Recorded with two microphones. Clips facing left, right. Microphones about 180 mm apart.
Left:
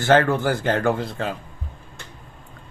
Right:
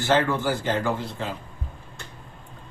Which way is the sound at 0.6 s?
60° left (ahead or behind).